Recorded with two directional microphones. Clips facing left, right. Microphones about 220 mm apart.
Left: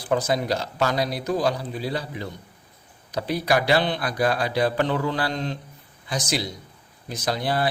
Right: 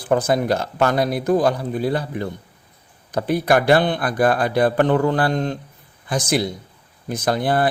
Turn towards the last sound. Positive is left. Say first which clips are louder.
# right 5 dB
turn(degrees=-50)  # may be behind; listen again after turning